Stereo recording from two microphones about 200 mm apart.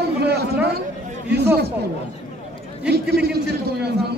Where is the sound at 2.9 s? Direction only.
55° right (ahead or behind).